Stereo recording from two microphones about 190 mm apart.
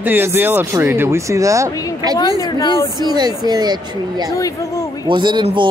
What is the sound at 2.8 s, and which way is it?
Speech, 20° right (ahead or behind).